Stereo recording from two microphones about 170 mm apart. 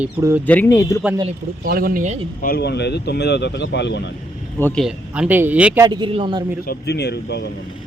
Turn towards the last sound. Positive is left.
turn(degrees=75)  # may be behind; listen again after turning